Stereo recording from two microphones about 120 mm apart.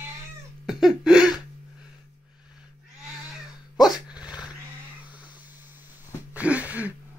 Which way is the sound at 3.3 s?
5° right (ahead or behind).